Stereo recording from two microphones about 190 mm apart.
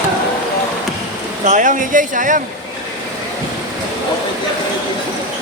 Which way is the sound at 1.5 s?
40° right (ahead or behind).